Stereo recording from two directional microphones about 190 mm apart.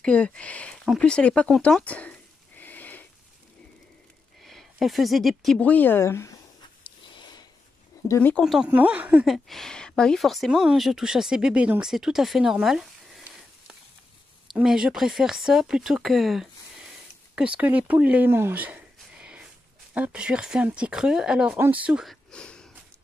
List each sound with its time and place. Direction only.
0.0 s speech: 5° left (ahead or behind)
4.4 s speech: centre (ahead or behind)
6.8 s a sound: 25° left (ahead or behind)
8.1 s speech: 10° left (ahead or behind)
14.5 s speech: centre (ahead or behind)